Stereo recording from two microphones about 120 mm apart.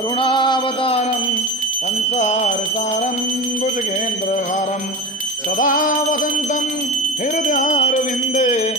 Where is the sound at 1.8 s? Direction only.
75° left (ahead or behind).